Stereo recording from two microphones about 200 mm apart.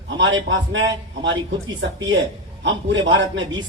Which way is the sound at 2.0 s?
70° right (ahead or behind).